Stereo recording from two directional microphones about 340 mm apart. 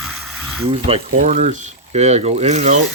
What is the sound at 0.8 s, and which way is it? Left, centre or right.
Speech, centre.